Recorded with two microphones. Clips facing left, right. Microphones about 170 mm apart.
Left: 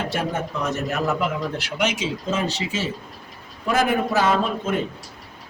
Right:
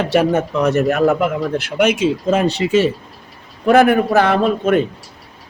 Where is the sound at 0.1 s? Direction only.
70° right (ahead or behind).